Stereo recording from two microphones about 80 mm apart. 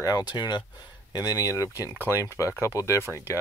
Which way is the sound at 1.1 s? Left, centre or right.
Left.